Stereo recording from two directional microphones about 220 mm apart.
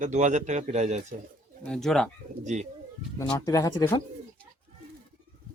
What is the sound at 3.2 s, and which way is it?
Speech, 15° left (ahead or behind).